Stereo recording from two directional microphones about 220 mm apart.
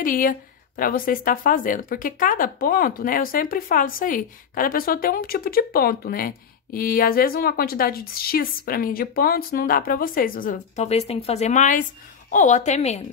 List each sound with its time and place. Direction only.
0.0 s a woman's voice: 40° left (ahead or behind)